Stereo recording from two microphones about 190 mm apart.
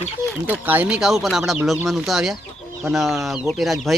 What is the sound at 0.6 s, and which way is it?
Speech, 10° right (ahead or behind).